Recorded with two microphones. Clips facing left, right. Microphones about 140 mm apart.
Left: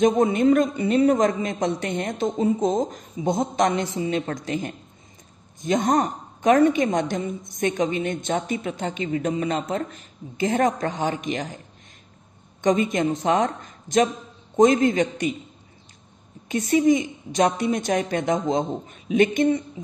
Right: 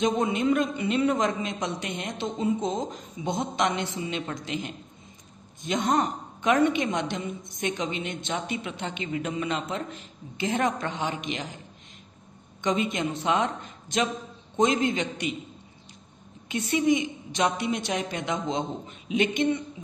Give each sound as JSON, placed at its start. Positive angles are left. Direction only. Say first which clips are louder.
{"t": 0.0, "sound": "a woman's voice", "louder": "left 6 dB", "side_deg": 45}
{"t": 12.6, "sound": "a woman's voice", "louder": "left 6 dB", "side_deg": 40}
{"t": 16.4, "sound": "a woman's voice", "louder": "left 5 dB", "side_deg": 40}